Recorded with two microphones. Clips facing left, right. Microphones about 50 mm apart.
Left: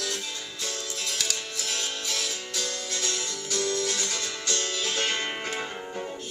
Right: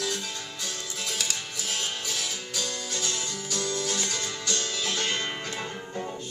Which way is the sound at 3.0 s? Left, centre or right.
Right.